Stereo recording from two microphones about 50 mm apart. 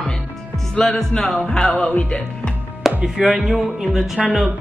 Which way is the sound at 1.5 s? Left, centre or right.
Centre.